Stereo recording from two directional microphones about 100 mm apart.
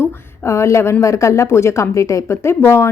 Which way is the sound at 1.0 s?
30° left (ahead or behind).